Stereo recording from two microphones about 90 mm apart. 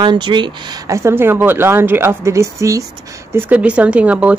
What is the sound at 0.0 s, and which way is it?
Speech, 60° right (ahead or behind).